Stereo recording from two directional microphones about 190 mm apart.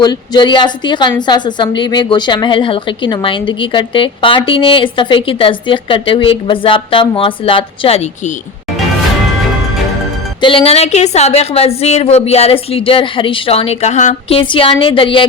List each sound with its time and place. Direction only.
0.0 s a woman's voice: 20° left (ahead or behind)
10.4 s a woman's voice: 30° left (ahead or behind)